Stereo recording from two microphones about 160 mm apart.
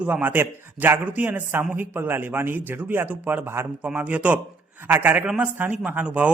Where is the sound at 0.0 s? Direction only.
10° right (ahead or behind).